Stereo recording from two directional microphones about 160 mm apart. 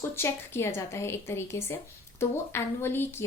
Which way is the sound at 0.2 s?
15° left (ahead or behind).